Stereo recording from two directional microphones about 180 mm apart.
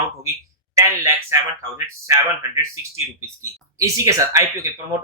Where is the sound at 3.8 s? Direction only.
15° right (ahead or behind).